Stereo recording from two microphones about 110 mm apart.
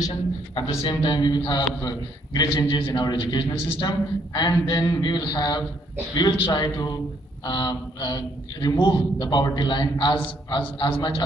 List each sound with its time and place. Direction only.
0.8 s a man's voice: 40° left (ahead or behind)